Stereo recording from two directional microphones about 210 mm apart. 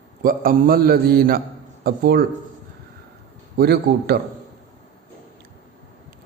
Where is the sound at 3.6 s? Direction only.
50° right (ahead or behind).